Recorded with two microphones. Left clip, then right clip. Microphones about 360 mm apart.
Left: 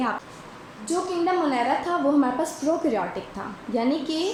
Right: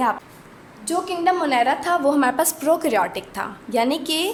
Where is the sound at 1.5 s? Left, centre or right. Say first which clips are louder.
Right 5 dB; right.